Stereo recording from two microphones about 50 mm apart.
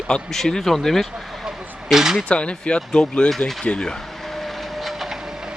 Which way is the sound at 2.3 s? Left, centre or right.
Left.